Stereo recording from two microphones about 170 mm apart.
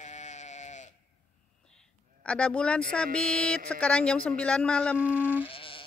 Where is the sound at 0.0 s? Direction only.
45° left (ahead or behind).